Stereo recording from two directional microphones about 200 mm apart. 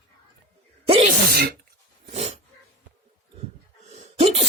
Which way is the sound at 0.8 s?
30° right (ahead or behind).